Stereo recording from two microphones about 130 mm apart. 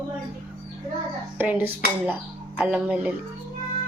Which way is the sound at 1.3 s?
15° right (ahead or behind).